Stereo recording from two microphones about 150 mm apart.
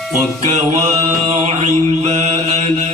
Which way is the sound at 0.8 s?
50° right (ahead or behind).